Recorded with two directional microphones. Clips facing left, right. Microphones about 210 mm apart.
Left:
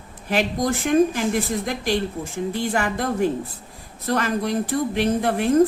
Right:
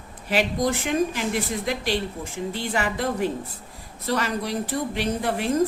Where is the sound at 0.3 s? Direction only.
45° left (ahead or behind).